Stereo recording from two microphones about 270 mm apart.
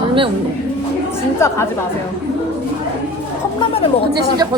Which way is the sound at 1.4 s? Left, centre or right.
Centre.